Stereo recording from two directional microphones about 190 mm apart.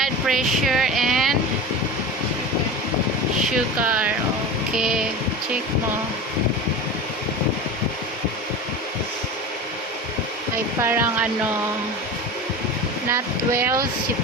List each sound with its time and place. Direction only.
0.0 s speech: centre (ahead or behind)
3.4 s speech: 5° right (ahead or behind)
4.7 s music: 5° right (ahead or behind)
10.8 s speech: 10° right (ahead or behind)
13.1 s speech: 15° right (ahead or behind)